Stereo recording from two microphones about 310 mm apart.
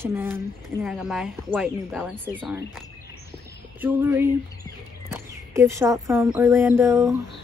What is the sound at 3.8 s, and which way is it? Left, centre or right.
Speech, centre.